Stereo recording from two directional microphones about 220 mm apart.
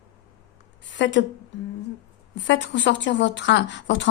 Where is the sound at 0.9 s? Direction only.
55° left (ahead or behind).